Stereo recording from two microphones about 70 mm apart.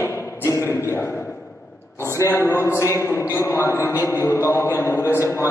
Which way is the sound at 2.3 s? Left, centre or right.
Left.